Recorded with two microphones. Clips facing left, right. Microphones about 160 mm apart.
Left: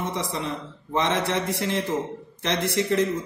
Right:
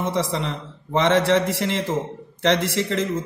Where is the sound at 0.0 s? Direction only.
85° right.